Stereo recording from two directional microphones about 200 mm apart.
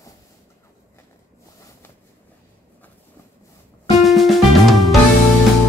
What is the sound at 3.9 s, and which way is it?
Music, centre (ahead or behind).